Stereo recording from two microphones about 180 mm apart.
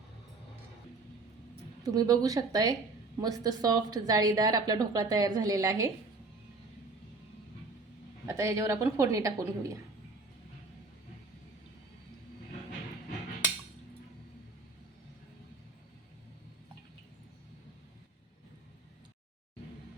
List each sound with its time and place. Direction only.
1.8 s a woman's voice: 20° right (ahead or behind)
8.3 s a woman's voice: 15° right (ahead or behind)